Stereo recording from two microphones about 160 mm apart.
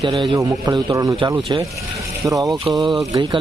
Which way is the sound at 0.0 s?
30° right (ahead or behind).